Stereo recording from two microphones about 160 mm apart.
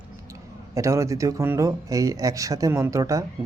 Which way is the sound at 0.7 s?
20° right (ahead or behind).